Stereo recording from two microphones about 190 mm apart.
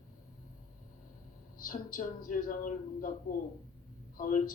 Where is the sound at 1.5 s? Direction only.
45° left (ahead or behind).